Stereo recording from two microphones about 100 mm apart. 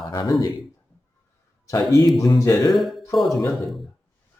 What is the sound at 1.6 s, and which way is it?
Speech, 30° left (ahead or behind).